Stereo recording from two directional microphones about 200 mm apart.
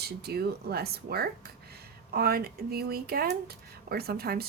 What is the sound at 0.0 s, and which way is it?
Speech, 55° right (ahead or behind).